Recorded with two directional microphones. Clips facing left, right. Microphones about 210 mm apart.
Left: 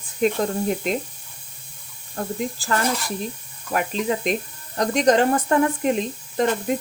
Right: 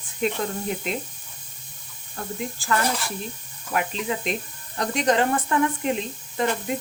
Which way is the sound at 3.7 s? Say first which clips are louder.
Left 3 dB; 45° left (ahead or behind).